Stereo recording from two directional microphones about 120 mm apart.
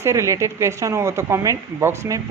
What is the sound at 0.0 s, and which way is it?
A woman's voice, 25° right (ahead or behind).